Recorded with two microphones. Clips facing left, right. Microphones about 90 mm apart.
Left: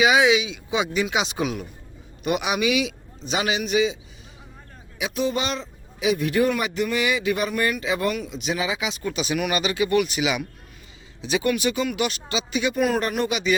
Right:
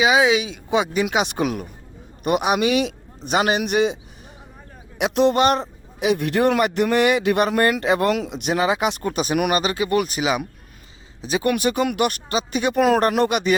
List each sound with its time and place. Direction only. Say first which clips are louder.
0.0 s a man's voice: right 1 dB; 30° right (ahead or behind); by 3.9 s 60° right (ahead or behind)
4.9 s a man's voice: right 8 dB; 70° right (ahead or behind); by 12.8 s 50° right (ahead or behind)
12.8 s a man's voice: right 8 dB; 75° right (ahead or behind); by 13.6 s 55° right (ahead or behind)